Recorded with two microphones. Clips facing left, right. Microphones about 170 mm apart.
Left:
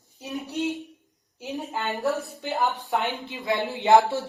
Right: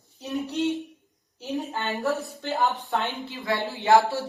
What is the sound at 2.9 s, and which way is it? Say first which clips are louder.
A woman's voice: left 1 dB; 15° left (ahead or behind).